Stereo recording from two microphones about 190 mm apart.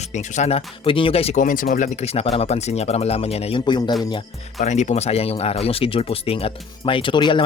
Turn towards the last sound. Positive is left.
turn(degrees=25)  # may be behind; listen again after turning